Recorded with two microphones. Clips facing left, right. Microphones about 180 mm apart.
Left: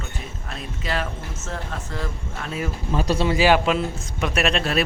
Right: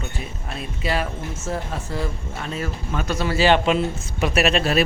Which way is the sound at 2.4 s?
5° left (ahead or behind).